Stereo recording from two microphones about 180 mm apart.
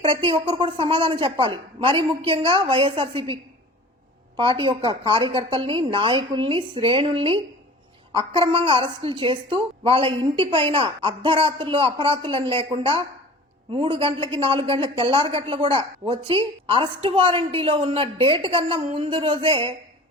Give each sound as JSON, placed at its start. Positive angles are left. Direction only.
{"t": 0.0, "sound": "a woman's voice", "side_deg": -25}
{"t": 4.4, "sound": "a woman's voice", "side_deg": -25}